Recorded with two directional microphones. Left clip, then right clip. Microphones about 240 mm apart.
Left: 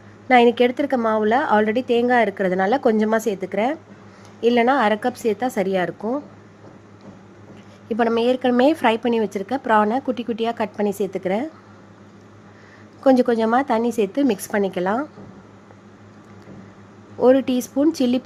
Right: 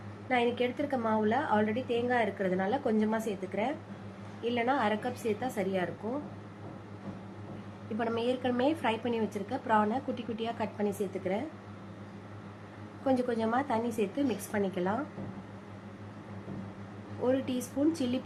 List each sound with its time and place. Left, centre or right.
0.3 s a woman's voice: left
7.9 s a woman's voice: left
13.1 s a woman's voice: left
17.2 s a woman's voice: left